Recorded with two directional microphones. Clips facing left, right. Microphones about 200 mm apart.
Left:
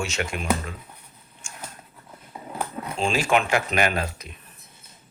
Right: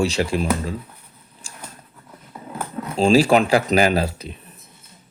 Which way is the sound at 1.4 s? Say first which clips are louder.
Even; 35° right (ahead or behind).